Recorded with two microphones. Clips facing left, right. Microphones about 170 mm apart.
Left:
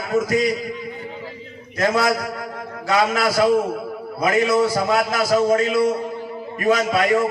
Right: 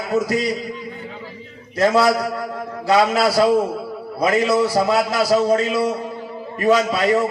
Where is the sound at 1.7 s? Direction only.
30° right (ahead or behind).